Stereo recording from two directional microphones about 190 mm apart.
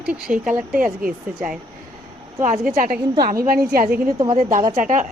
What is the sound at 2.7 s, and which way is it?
A woman's voice, 50° right (ahead or behind).